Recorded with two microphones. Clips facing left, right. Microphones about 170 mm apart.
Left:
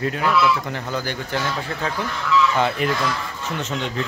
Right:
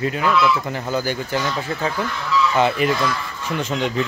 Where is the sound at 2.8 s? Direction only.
5° right (ahead or behind).